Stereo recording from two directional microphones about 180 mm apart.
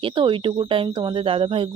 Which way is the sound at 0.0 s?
25° right (ahead or behind).